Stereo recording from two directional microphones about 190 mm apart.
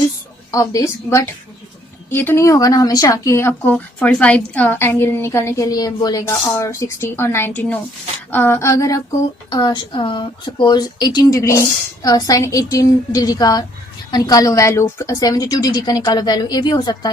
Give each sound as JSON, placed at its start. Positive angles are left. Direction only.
{"t": 0.5, "sound": "a woman's voice", "side_deg": 15}